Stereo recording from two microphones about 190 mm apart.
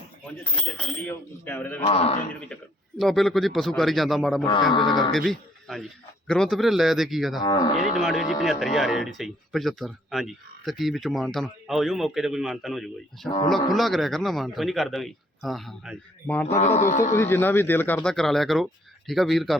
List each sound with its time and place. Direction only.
0.3 s speech: 5° left (ahead or behind)
1.8 s speech: 30° left (ahead or behind)
3.0 s speech: centre (ahead or behind)
4.7 s speech: 25° left (ahead or behind)
5.1 s speech: centre (ahead or behind)
16.2 s speech: 10° left (ahead or behind)
16.6 s speech: 35° left (ahead or behind)
17.2 s speech: 10° left (ahead or behind)